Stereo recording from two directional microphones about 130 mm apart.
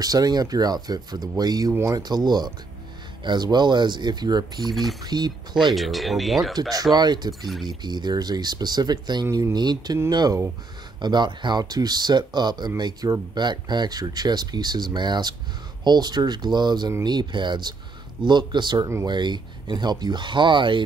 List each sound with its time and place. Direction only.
0.0 s speech: 30° right (ahead or behind)
5.8 s speech: centre (ahead or behind)
6.7 s speech: 30° right (ahead or behind)